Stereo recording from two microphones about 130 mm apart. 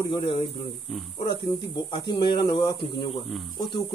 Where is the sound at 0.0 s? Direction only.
40° left (ahead or behind).